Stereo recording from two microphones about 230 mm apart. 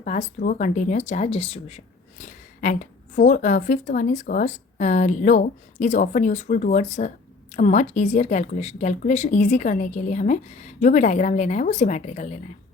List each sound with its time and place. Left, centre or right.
0.0 s speech: left